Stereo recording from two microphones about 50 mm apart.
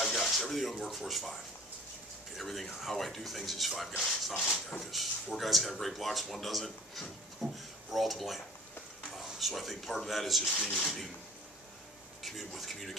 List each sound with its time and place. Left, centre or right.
0.0 s speech: centre
4.0 s speech: centre
4.7 s speech: centre
12.2 s speech: centre